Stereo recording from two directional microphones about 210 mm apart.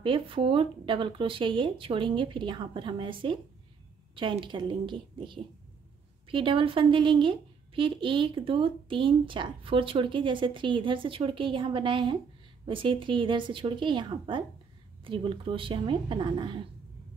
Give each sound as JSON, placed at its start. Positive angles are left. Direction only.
{"t": 0.0, "sound": "speech", "side_deg": -25}